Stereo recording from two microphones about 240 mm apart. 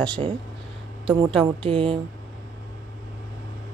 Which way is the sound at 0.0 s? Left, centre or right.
Centre.